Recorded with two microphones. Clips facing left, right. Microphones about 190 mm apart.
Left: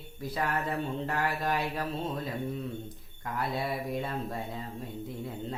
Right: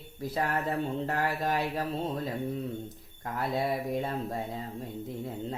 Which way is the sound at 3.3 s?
40° right (ahead or behind).